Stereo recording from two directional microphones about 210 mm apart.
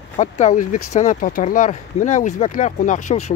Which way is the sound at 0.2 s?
35° left (ahead or behind).